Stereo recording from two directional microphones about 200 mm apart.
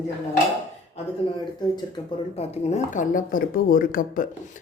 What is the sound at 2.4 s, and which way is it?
Speech, 35° left (ahead or behind).